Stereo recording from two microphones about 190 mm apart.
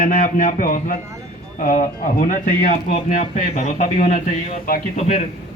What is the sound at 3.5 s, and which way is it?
Speech, 40° left (ahead or behind).